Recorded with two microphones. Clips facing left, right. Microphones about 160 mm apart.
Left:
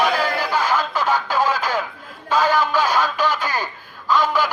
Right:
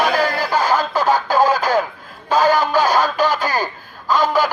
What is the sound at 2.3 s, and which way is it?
Music, 40° right (ahead or behind).